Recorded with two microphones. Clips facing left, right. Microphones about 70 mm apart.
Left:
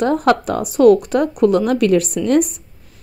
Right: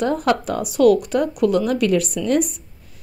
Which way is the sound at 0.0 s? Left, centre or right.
Left.